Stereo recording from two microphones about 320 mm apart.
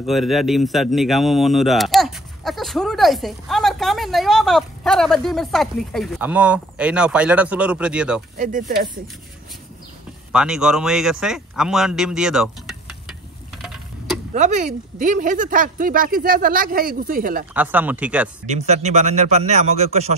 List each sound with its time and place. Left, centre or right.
0.0 s speech: centre
8.4 s speech: right
10.3 s a man's voice: centre
14.3 s speech: right
17.6 s speech: centre
18.5 s speech: right